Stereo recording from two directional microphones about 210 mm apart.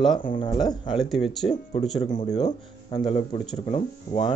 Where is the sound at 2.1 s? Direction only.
30° left (ahead or behind).